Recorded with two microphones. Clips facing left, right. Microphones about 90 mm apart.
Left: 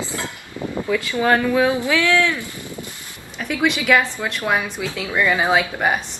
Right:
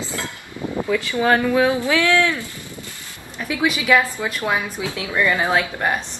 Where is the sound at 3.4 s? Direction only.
5° right (ahead or behind).